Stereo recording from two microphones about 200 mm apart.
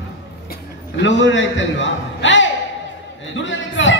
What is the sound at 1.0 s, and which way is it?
A man's voice, 65° left (ahead or behind).